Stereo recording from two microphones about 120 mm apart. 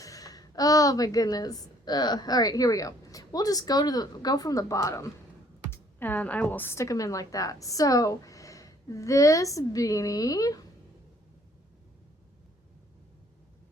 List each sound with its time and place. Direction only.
0.0 s a woman's voice: 30° left (ahead or behind)